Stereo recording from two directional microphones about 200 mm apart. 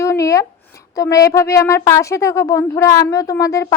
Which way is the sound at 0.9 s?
15° left (ahead or behind).